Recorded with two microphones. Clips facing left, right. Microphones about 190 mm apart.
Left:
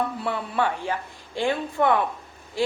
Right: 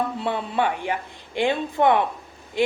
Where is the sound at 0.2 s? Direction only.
20° right (ahead or behind).